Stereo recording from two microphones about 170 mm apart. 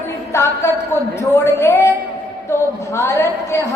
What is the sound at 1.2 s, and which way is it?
Speech, 15° left (ahead or behind).